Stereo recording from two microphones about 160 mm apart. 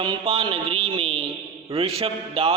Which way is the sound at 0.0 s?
35° right (ahead or behind).